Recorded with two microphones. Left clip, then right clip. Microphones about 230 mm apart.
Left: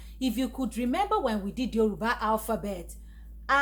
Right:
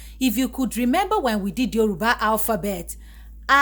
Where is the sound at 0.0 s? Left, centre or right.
Right.